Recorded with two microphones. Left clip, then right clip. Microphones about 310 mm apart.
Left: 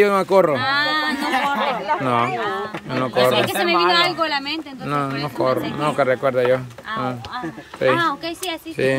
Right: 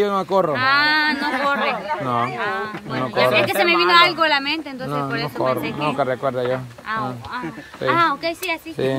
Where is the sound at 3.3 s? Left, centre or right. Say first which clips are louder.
Right 1 dB; centre.